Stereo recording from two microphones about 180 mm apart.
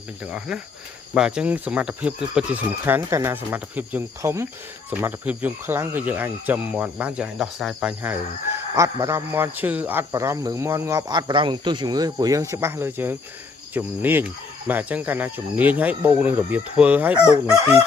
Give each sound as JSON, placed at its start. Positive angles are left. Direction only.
{"t": 0.3, "sound": "speech", "side_deg": -5}